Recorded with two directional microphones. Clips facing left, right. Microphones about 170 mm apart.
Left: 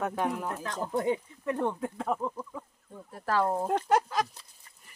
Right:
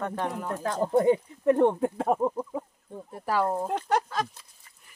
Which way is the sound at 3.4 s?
5° left (ahead or behind).